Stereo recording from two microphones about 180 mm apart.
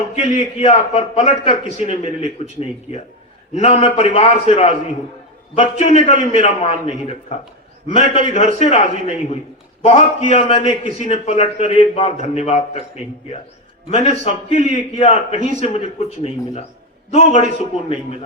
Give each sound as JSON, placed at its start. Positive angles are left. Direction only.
{"t": 0.2, "sound": "a man's voice", "side_deg": 40}
{"t": 13.9, "sound": "a man's voice", "side_deg": 40}